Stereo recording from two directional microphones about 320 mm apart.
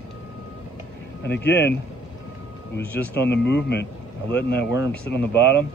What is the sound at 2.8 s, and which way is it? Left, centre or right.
Speech, centre.